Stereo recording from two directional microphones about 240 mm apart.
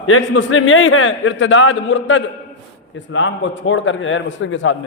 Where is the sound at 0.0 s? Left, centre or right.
Left.